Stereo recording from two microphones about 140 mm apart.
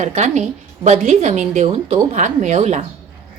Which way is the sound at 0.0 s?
55° right (ahead or behind).